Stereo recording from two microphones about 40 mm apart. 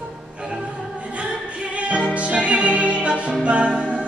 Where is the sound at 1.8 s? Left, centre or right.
Right.